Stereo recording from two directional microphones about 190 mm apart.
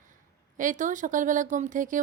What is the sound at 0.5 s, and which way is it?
A woman's voice, 40° right (ahead or behind).